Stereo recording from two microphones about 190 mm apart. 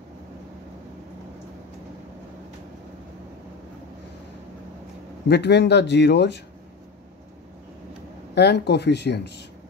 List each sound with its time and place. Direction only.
5.3 s speech: 60° left (ahead or behind)
8.4 s speech: 60° left (ahead or behind)